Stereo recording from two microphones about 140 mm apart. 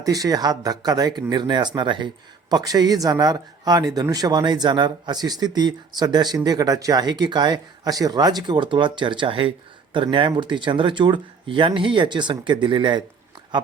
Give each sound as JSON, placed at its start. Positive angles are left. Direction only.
{"t": 0.0, "sound": "speech", "side_deg": -25}